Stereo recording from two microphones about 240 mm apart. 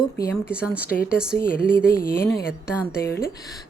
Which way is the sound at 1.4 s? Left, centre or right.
Left.